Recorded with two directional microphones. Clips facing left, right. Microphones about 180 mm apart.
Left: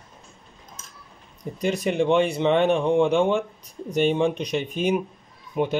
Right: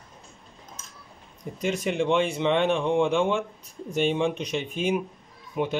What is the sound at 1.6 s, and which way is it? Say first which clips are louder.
Speech: left 3 dB; 40° left (ahead or behind).